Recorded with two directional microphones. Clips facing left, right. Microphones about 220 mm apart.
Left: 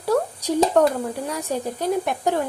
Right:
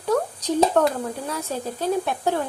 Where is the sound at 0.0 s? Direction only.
10° left (ahead or behind).